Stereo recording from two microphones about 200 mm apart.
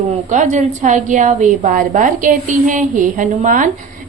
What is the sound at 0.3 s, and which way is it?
A woman's voice, 35° right (ahead or behind).